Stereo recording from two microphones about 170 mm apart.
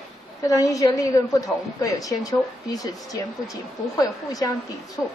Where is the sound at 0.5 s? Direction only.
20° left (ahead or behind).